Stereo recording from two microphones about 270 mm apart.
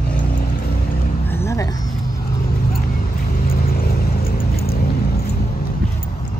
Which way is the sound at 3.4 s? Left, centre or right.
Left.